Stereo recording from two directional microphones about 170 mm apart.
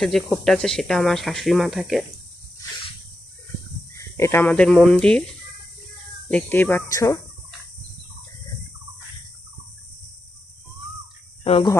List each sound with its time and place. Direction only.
0.4 s speech: 5° left (ahead or behind)
3.9 s speech: 15° left (ahead or behind)
6.3 s speech: 10° left (ahead or behind)
11.4 s speech: 30° left (ahead or behind)